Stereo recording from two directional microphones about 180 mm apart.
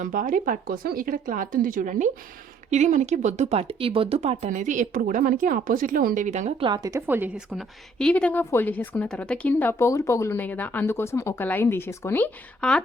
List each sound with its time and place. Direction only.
0.0 s speech: 50° right (ahead or behind)
6.7 s a woman's voice: 20° right (ahead or behind); by 12.8 s 10° left (ahead or behind)